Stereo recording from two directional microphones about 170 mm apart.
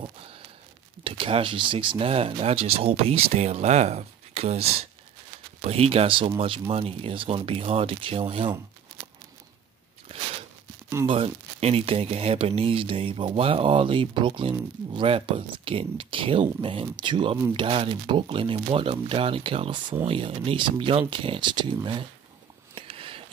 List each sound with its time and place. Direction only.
1.0 s speech: 30° right (ahead or behind)
11.1 s speech: 35° right (ahead or behind)
22.8 s a sound: 30° right (ahead or behind)